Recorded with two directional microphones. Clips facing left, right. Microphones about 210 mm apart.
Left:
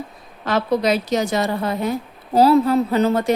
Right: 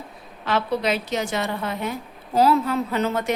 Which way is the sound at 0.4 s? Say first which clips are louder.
Left 4 dB; 40° left (ahead or behind).